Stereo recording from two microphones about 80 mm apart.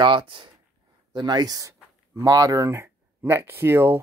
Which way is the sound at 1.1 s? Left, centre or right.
Right.